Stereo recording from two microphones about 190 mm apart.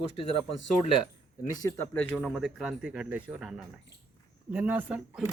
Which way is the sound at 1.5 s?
20° left (ahead or behind).